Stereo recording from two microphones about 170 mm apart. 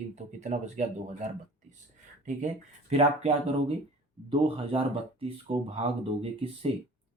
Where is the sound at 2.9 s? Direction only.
35° right (ahead or behind).